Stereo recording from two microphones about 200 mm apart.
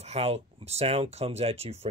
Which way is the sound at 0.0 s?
30° right (ahead or behind).